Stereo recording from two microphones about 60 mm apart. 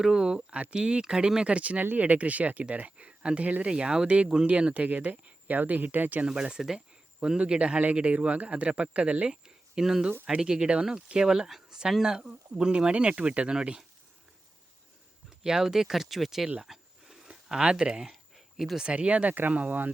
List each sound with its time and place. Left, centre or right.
0.0 s speech: centre; by 6.2 s right
6.2 s speech: centre
15.4 s speech: centre
16.6 s a sound: centre
18.9 s speech: right